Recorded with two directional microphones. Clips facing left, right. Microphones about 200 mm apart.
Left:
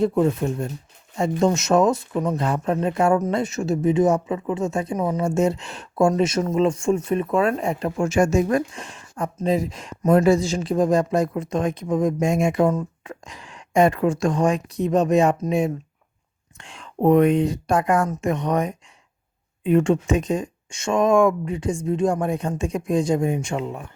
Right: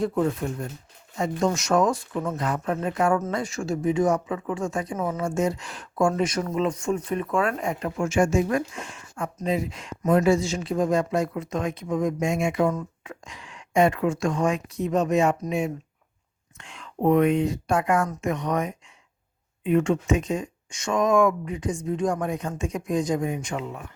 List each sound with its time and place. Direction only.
0.0 s speech: 20° left (ahead or behind)